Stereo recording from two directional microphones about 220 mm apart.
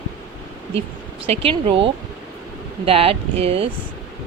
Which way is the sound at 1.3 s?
25° right (ahead or behind).